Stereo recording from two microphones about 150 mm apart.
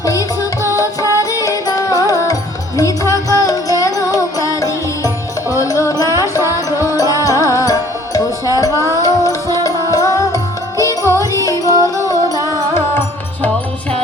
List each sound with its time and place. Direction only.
0.0 s music: 20° left (ahead or behind)
11.6 s music: 20° right (ahead or behind)
12.7 s music: 15° left (ahead or behind)